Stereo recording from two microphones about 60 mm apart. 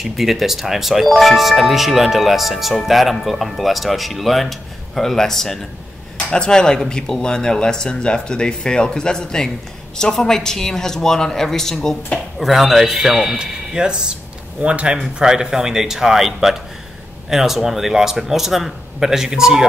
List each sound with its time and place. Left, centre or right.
0.0 s speech: centre